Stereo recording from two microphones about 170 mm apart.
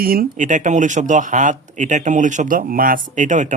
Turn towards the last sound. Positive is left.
turn(degrees=-50)  # may be behind; listen again after turning